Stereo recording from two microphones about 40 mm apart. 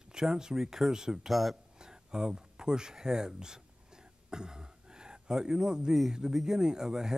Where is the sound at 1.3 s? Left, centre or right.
Centre.